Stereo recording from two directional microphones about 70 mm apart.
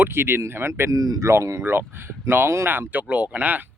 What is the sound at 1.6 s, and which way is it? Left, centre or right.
Speech, right.